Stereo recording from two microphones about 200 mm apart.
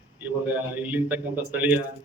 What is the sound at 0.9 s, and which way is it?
Speech, 10° right (ahead or behind).